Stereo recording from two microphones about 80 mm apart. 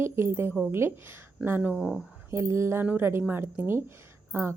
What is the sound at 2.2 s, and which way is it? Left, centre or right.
A woman's voice, right.